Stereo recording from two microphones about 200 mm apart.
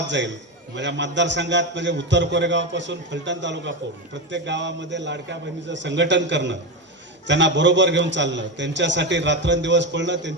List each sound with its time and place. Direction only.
0.8 s a man's voice: 65° right (ahead or behind)